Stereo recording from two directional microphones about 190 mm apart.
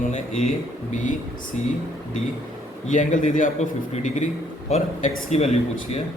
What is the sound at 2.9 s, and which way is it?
A man's voice, 40° left (ahead or behind).